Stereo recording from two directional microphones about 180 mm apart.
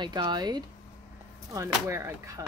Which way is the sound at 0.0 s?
25° right (ahead or behind).